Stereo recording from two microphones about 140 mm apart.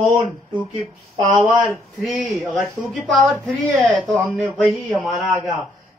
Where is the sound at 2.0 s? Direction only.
Centre (ahead or behind).